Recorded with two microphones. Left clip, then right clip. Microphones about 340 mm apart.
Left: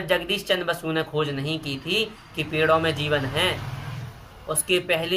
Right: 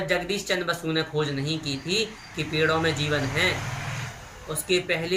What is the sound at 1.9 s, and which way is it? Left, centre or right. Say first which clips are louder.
Speech: left 3 dB; left.